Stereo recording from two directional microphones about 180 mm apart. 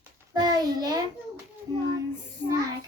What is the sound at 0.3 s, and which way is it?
Speech, 20° right (ahead or behind).